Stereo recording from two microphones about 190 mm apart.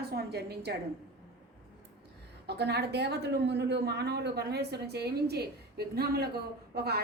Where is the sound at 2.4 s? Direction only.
60° right (ahead or behind).